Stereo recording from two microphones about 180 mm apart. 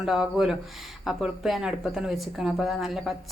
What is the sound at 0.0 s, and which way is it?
Speech, 5° right (ahead or behind).